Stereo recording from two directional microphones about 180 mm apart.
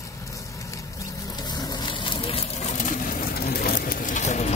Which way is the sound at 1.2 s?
20° left (ahead or behind).